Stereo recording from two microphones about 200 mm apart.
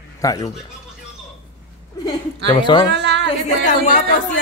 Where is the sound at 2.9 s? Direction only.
60° right (ahead or behind).